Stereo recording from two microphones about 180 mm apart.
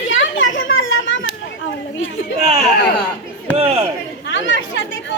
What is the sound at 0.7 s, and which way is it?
Children playing, 90° left.